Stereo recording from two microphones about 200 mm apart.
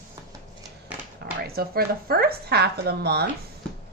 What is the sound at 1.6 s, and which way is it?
A woman's voice, 50° right (ahead or behind).